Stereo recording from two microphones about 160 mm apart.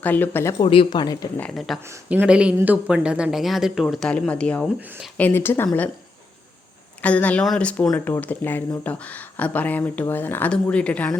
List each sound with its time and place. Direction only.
0.0 s speech: 10° left (ahead or behind)
0.6 s speech: 30° left (ahead or behind)
1.4 s speech: centre (ahead or behind)
1.9 s speech: 10° right (ahead or behind); by 5.9 s 10° left (ahead or behind)
7.0 s speech: 10° left (ahead or behind)